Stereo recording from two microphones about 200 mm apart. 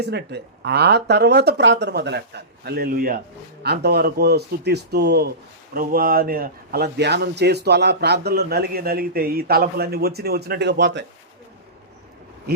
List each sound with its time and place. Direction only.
0.0 s a man's voice: 55° right (ahead or behind)